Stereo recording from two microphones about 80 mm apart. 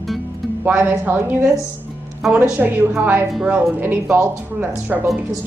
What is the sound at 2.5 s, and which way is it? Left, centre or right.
Speech, right.